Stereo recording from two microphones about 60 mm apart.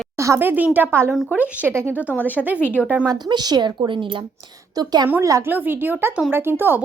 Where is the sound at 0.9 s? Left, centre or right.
Right.